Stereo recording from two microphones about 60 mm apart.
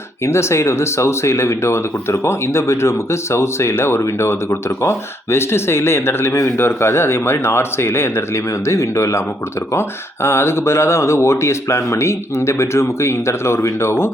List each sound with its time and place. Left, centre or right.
0.3 s speech: left
10.2 s speech: left